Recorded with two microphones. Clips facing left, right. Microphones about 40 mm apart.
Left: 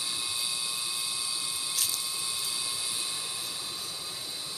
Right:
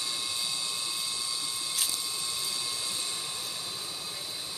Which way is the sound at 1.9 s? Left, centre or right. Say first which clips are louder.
Even; centre.